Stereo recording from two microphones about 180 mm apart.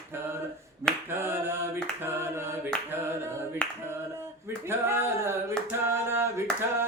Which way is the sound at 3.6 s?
10° left (ahead or behind).